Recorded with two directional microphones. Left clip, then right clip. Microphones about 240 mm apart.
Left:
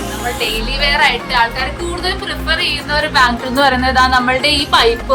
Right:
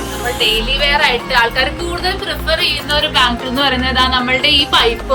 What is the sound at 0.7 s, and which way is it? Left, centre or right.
A woman's voice, centre.